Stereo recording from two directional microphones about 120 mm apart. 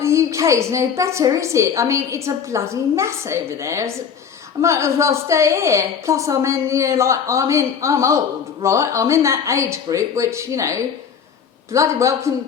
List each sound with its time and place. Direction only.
0.0 s a woman's voice: 25° right (ahead or behind)